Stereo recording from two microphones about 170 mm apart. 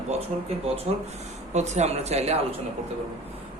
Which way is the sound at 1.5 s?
40° right (ahead or behind).